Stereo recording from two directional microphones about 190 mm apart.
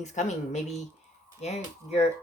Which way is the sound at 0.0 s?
40° left (ahead or behind).